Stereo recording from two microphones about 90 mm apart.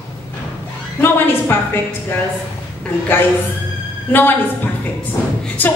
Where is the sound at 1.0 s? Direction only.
25° left (ahead or behind).